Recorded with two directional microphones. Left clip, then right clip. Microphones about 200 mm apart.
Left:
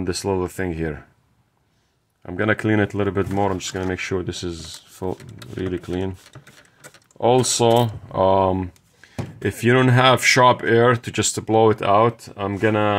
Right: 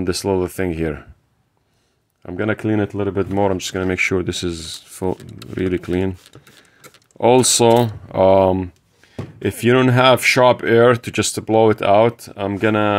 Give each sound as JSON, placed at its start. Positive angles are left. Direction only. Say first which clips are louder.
{"t": 0.0, "sound": "speech", "louder": "right 4 dB", "side_deg": -25}
{"t": 2.2, "sound": "speech", "louder": "even", "side_deg": -10}
{"t": 3.3, "sound": "speech", "louder": "right 4 dB", "side_deg": -25}
{"t": 7.2, "sound": "speech", "louder": "right 4 dB", "side_deg": -30}